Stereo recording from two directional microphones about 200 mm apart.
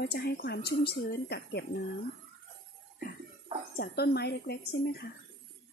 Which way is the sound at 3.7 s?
50° left (ahead or behind).